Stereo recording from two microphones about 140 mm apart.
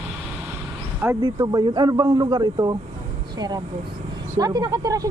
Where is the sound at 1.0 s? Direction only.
20° right (ahead or behind).